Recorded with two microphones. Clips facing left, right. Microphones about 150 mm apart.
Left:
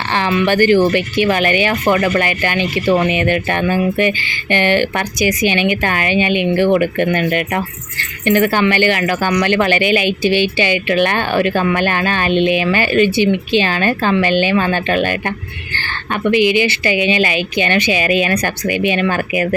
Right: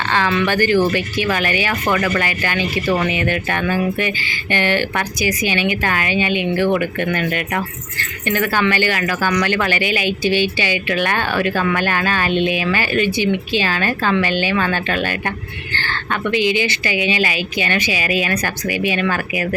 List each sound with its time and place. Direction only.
0.1 s speech: 15° left (ahead or behind)
16.3 s a woman's voice: 15° left (ahead or behind)